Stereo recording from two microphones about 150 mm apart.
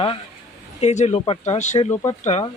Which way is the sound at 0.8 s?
45° left (ahead or behind).